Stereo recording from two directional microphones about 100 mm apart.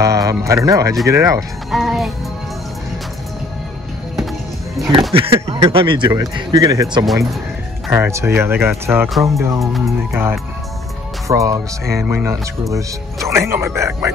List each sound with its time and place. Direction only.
0.0 s speech: 35° right (ahead or behind)
1.7 s music: centre (ahead or behind)
4.8 s speech: centre (ahead or behind)
5.1 s speech: 65° right (ahead or behind)
6.5 s speech: 35° right (ahead or behind)
7.9 s speech: 30° right (ahead or behind)